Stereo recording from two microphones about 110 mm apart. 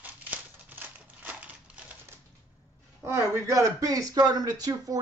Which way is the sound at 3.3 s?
30° right (ahead or behind).